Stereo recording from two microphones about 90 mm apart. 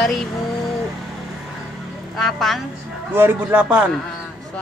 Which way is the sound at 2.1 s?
5° left (ahead or behind).